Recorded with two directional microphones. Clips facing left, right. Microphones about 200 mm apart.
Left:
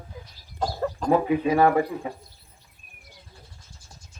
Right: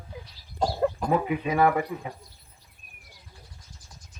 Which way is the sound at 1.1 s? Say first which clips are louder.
Left 4 dB; 35° left (ahead or behind).